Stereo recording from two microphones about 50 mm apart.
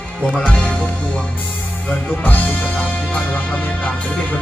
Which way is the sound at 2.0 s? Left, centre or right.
Left.